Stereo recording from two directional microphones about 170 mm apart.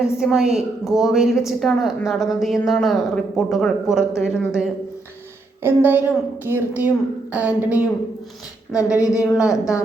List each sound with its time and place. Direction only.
0.0 s a woman's voice: 5° right (ahead or behind)
8.7 s speech: 20° left (ahead or behind)
9.2 s a woman's voice: 5° right (ahead or behind)